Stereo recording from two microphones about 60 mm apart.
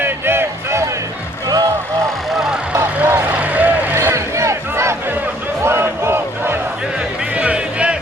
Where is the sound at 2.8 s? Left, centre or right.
Right.